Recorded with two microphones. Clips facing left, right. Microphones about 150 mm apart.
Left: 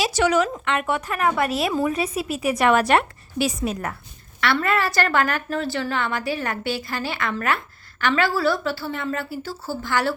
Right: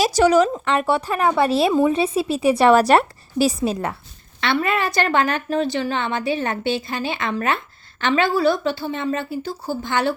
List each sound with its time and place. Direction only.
0.0 s a woman's voice: 35° right (ahead or behind); by 10.2 s 20° right (ahead or behind)